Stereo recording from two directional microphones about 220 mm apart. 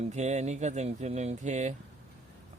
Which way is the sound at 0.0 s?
30° right (ahead or behind).